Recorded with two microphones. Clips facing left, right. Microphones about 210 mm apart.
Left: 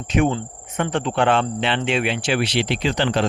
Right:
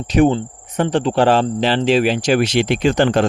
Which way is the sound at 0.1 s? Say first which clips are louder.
Right 6 dB; 35° right (ahead or behind).